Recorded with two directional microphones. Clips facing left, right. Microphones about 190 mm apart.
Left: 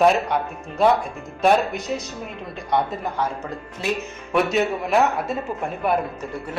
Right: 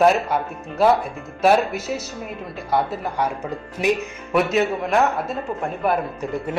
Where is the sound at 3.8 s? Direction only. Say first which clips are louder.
Right 5 dB; 15° right (ahead or behind).